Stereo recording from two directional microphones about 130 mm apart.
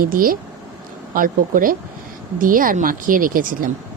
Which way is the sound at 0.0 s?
90° right.